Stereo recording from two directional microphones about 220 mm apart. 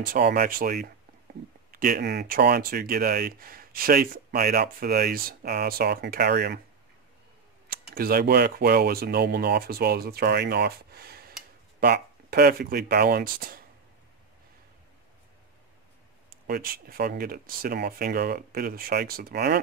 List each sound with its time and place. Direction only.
0.0 s speech: 40° right (ahead or behind)
7.9 s speech: 45° right (ahead or behind)
16.4 s speech: 45° right (ahead or behind)